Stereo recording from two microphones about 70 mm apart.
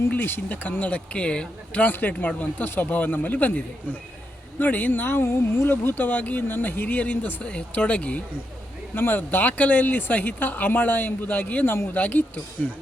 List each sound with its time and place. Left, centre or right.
0.1 s speech: left